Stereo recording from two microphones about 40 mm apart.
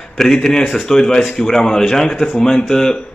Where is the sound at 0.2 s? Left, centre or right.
Centre.